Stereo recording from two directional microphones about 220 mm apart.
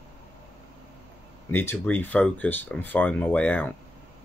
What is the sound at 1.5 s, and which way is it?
Speech, 10° left (ahead or behind).